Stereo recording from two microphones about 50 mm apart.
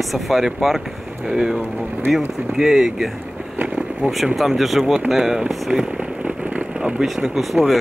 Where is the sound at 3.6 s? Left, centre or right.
Right.